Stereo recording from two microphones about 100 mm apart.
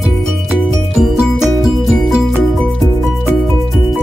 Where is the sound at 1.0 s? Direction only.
5° right (ahead or behind).